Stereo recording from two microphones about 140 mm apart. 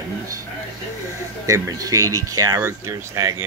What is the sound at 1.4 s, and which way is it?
Speech, 25° right (ahead or behind).